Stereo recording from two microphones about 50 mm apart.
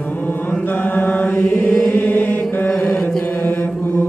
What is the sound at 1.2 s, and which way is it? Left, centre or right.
Mantra, left.